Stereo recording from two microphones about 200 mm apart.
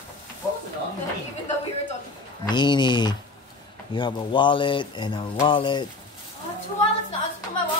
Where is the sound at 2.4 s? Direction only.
20° left (ahead or behind).